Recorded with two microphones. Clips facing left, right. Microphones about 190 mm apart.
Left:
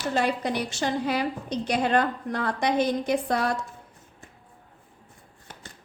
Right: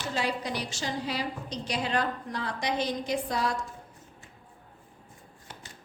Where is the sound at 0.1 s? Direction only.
55° left (ahead or behind).